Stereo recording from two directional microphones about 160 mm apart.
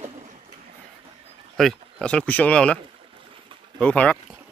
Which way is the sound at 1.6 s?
5° left (ahead or behind).